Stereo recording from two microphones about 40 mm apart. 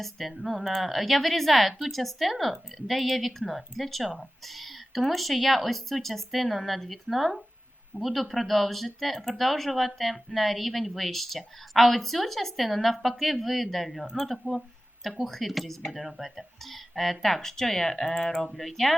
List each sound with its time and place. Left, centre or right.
0.0 s speech: centre